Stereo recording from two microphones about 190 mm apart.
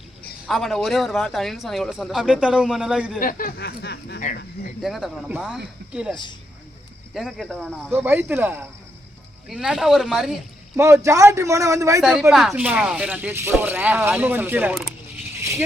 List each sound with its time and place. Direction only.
0.4 s speech: centre (ahead or behind)
3.2 s speech: 50° left (ahead or behind)
4.8 s speech: centre (ahead or behind)
10.8 s speech: 15° right (ahead or behind)
12.3 s speech: centre (ahead or behind)